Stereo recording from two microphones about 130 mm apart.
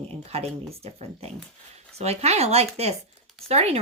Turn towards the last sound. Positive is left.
turn(degrees=-55)  # may be behind; listen again after turning